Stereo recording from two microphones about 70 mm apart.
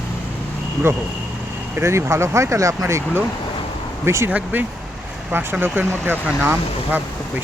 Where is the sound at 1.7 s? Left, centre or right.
Right.